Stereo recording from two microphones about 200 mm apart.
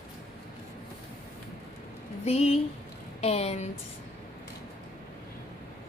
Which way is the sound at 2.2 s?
30° left (ahead or behind).